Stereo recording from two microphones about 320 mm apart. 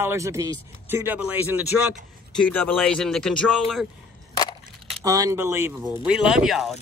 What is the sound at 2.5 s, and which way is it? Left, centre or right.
Speech, centre.